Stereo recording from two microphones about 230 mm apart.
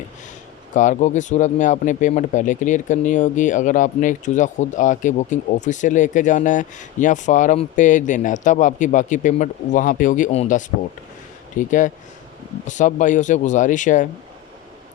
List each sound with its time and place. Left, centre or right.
0.7 s speech: left